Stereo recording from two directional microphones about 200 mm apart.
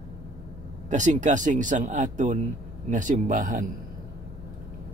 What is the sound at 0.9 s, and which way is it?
Speech, 35° right (ahead or behind).